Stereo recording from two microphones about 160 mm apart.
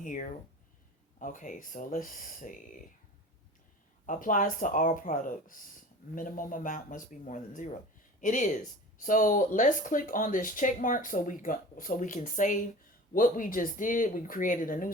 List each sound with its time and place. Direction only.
0.0 s speech: 55° left (ahead or behind)
4.0 s speech: 55° left (ahead or behind)